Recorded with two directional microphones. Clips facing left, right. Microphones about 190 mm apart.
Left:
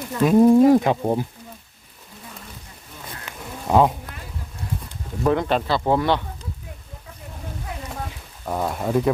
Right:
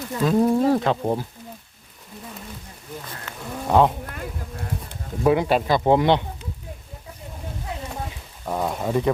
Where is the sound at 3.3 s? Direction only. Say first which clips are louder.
Even; 15° left (ahead or behind).